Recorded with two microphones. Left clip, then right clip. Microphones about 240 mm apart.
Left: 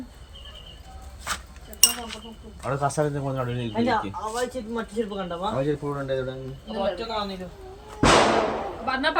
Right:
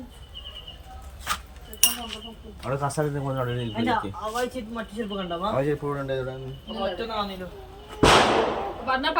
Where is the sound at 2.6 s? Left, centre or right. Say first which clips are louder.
Left 2 dB; centre.